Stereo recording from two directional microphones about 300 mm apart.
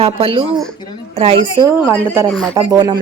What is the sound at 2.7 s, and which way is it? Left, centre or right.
Speech, centre.